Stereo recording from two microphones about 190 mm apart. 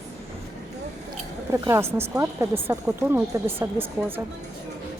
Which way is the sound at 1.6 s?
15° right (ahead or behind).